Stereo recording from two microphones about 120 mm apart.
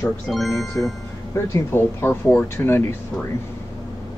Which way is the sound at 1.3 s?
20° left (ahead or behind).